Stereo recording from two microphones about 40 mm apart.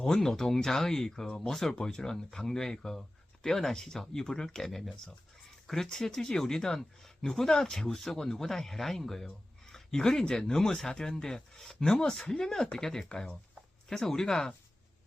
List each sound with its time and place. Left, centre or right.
0.0 s speech: centre
5.6 s speech: centre